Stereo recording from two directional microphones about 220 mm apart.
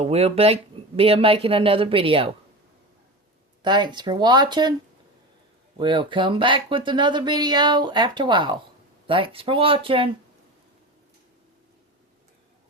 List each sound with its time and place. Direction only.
0.0 s speech: 30° right (ahead or behind)
3.6 s speech: 20° right (ahead or behind)
5.8 s speech: 20° right (ahead or behind)